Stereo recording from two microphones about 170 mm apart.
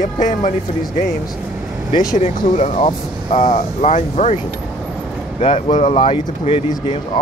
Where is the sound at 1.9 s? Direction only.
20° left (ahead or behind).